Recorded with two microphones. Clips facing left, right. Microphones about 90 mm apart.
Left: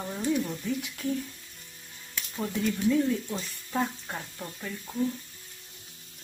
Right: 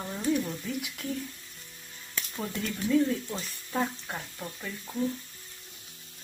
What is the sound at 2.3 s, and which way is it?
Speech, centre (ahead or behind).